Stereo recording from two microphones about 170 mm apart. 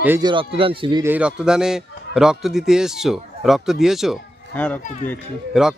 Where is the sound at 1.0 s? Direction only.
10° right (ahead or behind).